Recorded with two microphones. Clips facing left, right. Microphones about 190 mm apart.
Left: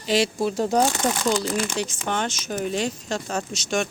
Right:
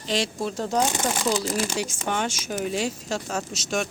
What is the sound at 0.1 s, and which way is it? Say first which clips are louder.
Speech: left 5 dB; 5° left (ahead or behind).